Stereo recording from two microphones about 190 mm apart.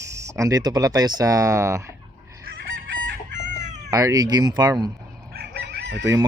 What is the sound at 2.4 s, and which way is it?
Chicken, 55° right (ahead or behind).